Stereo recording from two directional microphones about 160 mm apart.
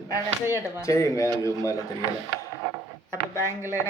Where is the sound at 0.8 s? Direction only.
20° left (ahead or behind).